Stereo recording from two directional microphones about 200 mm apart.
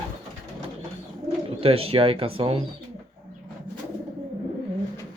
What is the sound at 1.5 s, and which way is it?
Speech, 30° right (ahead or behind).